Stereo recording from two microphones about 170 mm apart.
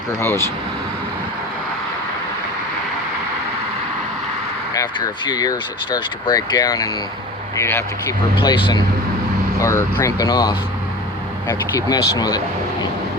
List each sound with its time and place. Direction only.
0.2 s speech: 15° left (ahead or behind)
4.7 s speech: 20° left (ahead or behind)
8.4 s speech: 30° left (ahead or behind)